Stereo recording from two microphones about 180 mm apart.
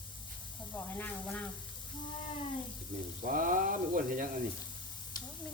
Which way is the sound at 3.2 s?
50° right (ahead or behind).